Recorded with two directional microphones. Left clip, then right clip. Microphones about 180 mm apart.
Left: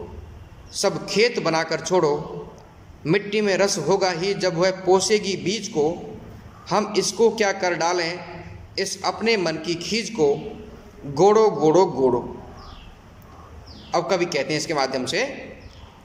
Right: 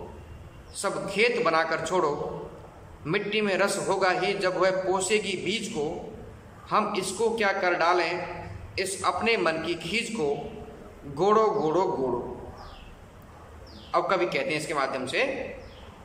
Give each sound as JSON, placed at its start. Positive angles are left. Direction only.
{"t": 0.7, "sound": "a man's voice", "side_deg": 35}
{"t": 13.9, "sound": "a man's voice", "side_deg": 30}